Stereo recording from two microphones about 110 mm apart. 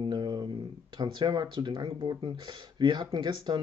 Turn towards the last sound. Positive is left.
turn(degrees=-45)  # may be behind; listen again after turning